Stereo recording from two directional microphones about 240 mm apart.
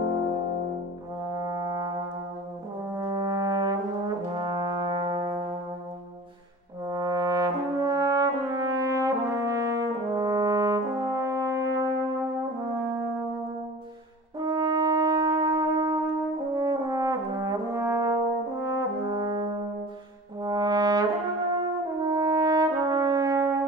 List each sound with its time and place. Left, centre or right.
1.2 s brass instrument: centre
6.9 s brass instrument: centre
14.4 s brass instrument: centre